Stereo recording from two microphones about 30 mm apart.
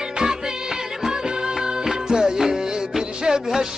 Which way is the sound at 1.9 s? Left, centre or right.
Right.